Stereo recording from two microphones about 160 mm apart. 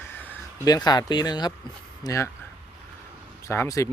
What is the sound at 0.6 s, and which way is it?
Speech, 25° left (ahead or behind).